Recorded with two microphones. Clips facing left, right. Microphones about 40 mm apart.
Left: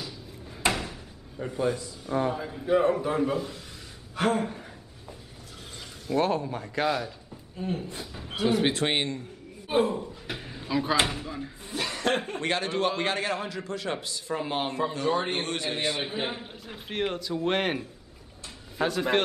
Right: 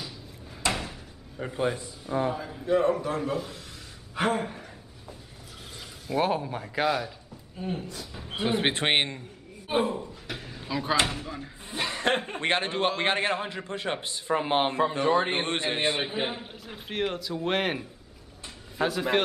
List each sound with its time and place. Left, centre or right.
0.6 s drawer open or close: left
1.4 s a man's voice: right
2.0 s a man's voice: centre
4.1 s speech: centre
6.0 s a man's voice: centre
8.1 s a sound: centre
8.4 s a man's voice: right
9.7 s speech: centre
10.3 s a sound: centre
10.6 s a man's voice: centre
11.7 s chuckle: right
12.3 s a man's voice: right
16.2 s a man's voice: centre